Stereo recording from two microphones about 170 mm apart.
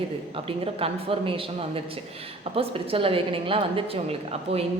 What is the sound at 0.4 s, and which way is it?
A woman's voice, 35° right (ahead or behind).